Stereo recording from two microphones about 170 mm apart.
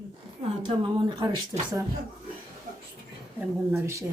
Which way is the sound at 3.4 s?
15° right (ahead or behind).